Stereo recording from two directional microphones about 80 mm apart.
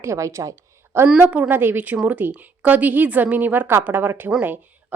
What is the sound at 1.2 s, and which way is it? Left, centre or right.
A woman's voice, centre.